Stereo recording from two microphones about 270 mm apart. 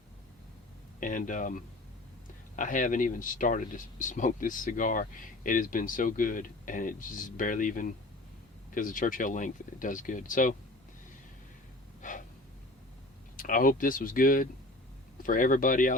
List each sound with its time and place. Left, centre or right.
0.9 s speech: left
12.0 s breathing: left
13.3 s speech: left